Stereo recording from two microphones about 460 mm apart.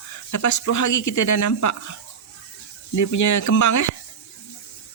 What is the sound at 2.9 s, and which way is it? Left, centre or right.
Speech, left.